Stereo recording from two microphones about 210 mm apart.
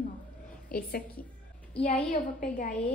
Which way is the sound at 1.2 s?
45° left (ahead or behind).